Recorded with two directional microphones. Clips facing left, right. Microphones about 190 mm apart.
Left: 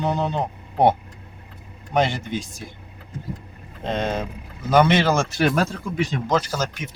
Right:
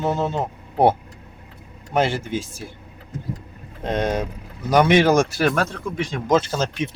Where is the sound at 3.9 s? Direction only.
10° right (ahead or behind).